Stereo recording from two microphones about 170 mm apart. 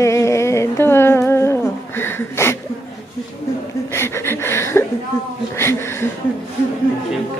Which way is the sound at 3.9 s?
15° left (ahead or behind).